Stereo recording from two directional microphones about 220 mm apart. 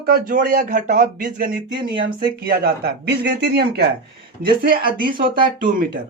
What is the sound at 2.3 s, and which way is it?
Speech, 45° right (ahead or behind).